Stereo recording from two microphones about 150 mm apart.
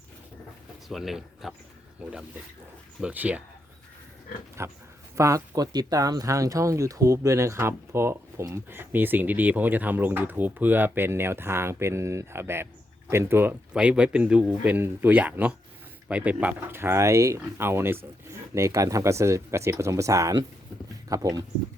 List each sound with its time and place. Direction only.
0.9 s speech: centre (ahead or behind)
3.0 s speech: 10° right (ahead or behind)
4.6 s speech: 15° right (ahead or behind)